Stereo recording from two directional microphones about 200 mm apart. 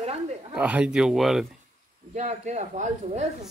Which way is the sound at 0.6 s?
5° right (ahead or behind).